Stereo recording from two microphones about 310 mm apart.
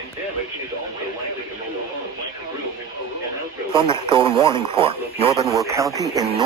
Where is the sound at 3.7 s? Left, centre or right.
Centre.